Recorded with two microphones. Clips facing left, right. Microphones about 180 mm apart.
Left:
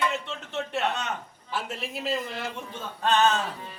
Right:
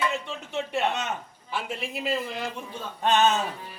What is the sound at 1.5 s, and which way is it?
A man's voice, centre (ahead or behind).